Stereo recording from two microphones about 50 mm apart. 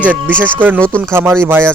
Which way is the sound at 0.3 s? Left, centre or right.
Right.